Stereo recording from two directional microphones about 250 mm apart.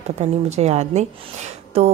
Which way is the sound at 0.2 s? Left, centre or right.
Right.